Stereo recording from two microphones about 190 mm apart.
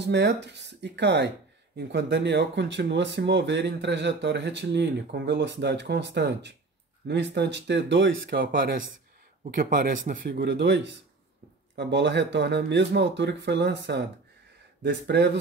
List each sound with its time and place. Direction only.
0.0 s speech: 65° right (ahead or behind)
15.0 s speech: 60° right (ahead or behind)